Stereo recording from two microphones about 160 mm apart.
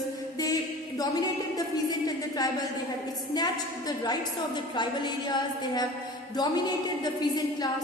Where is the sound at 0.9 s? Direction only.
25° left (ahead or behind).